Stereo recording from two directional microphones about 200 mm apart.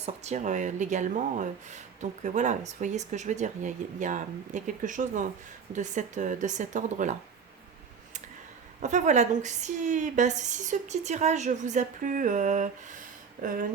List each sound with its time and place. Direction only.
0.0 s a woman's voice: 35° right (ahead or behind)
8.8 s a woman's voice: 40° right (ahead or behind)